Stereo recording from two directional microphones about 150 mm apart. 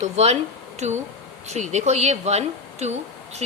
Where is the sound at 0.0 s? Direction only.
45° right (ahead or behind).